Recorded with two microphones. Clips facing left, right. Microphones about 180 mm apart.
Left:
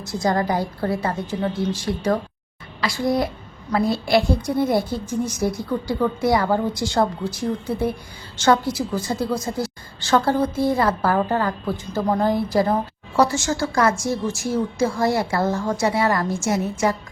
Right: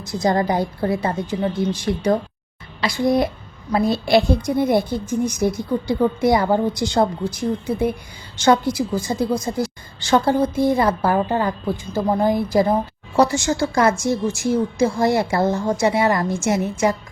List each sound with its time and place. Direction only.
0.0 s a woman's voice: 20° right (ahead or behind)